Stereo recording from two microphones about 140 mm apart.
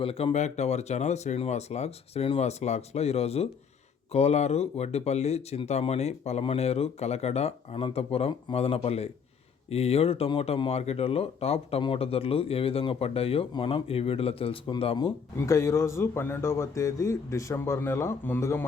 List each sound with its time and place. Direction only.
0.0 s speech: 40° left (ahead or behind)
15.4 s a man's voice: 20° left (ahead or behind)